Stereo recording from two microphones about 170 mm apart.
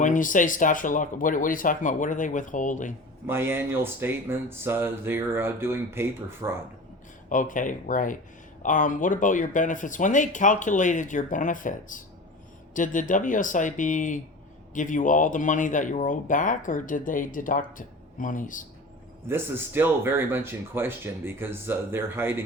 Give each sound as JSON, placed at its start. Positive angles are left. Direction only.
{"t": 0.0, "sound": "speech", "side_deg": 50}
{"t": 3.2, "sound": "speech", "side_deg": -10}
{"t": 7.3, "sound": "speech", "side_deg": 50}
{"t": 19.3, "sound": "speech", "side_deg": -10}